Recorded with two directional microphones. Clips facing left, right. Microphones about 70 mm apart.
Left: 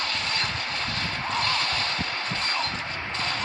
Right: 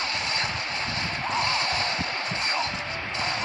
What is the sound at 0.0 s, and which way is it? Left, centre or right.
Vehicle, left.